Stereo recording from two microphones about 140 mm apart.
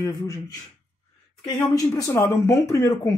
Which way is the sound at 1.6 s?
25° left (ahead or behind).